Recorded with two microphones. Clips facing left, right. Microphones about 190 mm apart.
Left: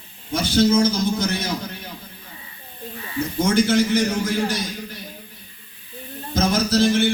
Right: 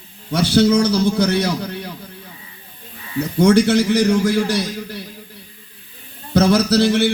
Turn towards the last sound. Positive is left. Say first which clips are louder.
# right 3 dB
turn(degrees=-70)  # may be behind; listen again after turning